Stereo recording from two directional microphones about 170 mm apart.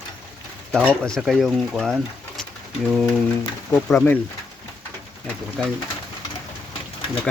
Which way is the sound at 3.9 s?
10° left (ahead or behind).